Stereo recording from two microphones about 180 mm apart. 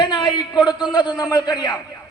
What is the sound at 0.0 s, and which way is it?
A man's voice, 25° left (ahead or behind).